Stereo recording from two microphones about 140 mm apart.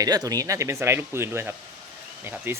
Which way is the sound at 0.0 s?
25° right (ahead or behind).